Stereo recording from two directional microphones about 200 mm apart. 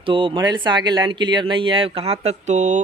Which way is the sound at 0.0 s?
25° right (ahead or behind).